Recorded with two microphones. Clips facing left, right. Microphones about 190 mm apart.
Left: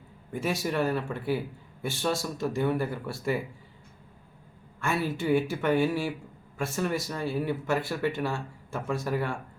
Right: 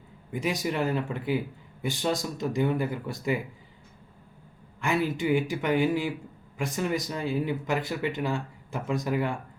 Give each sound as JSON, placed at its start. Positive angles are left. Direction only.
{"t": 0.3, "sound": "speech", "side_deg": -15}
{"t": 4.8, "sound": "speech", "side_deg": -15}